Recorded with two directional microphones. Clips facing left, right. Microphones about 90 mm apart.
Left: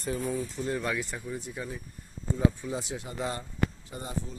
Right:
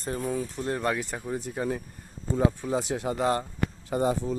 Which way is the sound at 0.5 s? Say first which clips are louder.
Right 3 dB; 50° right (ahead or behind).